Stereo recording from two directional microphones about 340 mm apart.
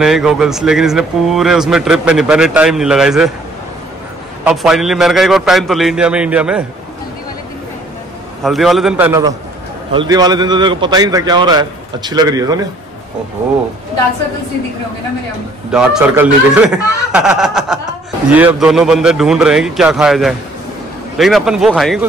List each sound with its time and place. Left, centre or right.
0.0 s speech: centre
4.5 s speech: centre
8.4 s a man's voice: centre
15.7 s speech: centre